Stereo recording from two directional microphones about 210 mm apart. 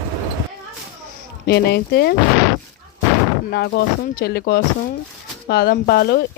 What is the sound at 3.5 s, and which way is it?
Speech, 50° left (ahead or behind).